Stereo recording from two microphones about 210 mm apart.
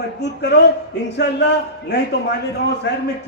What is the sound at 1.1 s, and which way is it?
Speech, 55° left (ahead or behind).